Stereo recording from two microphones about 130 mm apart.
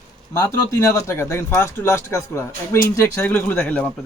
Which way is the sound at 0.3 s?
20° left (ahead or behind).